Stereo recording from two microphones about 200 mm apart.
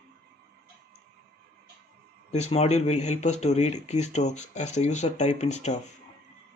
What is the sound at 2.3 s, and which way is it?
Speech, 35° left (ahead or behind).